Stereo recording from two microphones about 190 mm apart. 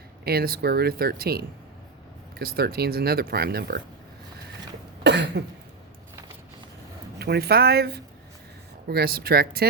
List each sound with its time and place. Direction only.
0.3 s speech: 55° right (ahead or behind)
5.0 s cough: 65° right (ahead or behind)
7.2 s speech: 55° right (ahead or behind)